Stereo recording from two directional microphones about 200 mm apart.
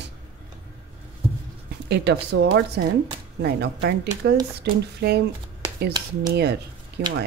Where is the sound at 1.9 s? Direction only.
55° right (ahead or behind).